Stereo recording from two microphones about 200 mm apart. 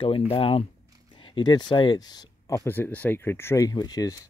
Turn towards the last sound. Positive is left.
turn(degrees=15)  # may be behind; listen again after turning